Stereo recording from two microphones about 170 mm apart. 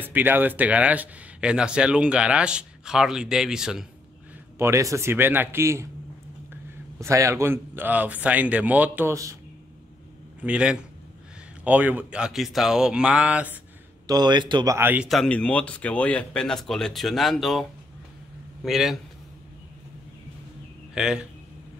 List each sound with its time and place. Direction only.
0.0 s speech: 10° right (ahead or behind)
4.6 s speech: 15° right (ahead or behind)
7.0 s speech: 15° right (ahead or behind)
10.4 s speech: 5° right (ahead or behind)
14.0 s speech: 25° right (ahead or behind)
14.8 s speech: 10° right (ahead or behind)
15.0 s speech: 5° left (ahead or behind)
20.9 s speech: 5° right (ahead or behind)